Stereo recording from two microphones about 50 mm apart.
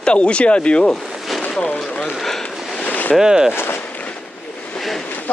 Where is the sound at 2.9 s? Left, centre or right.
Left.